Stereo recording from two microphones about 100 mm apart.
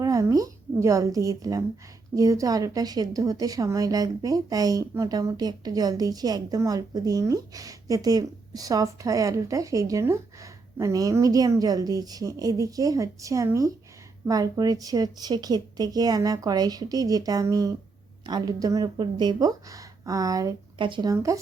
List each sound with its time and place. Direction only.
0.0 s a woman's voice: 30° right (ahead or behind)
20.7 s speech: 55° right (ahead or behind)
21.1 s a woman's voice: 35° right (ahead or behind)